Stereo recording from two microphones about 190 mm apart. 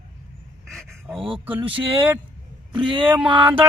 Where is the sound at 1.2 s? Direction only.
30° right (ahead or behind).